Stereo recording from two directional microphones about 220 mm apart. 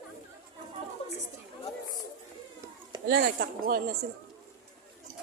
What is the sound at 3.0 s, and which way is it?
Speech, 45° right (ahead or behind).